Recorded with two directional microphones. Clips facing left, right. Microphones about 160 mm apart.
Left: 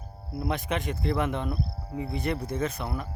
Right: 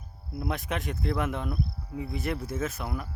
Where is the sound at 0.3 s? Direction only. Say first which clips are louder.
Left 2 dB; centre (ahead or behind).